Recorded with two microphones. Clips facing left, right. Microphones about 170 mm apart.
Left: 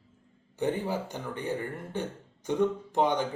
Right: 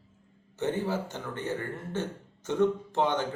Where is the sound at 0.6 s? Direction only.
15° left (ahead or behind).